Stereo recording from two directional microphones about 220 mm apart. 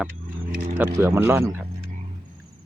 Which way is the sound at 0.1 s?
40° right (ahead or behind).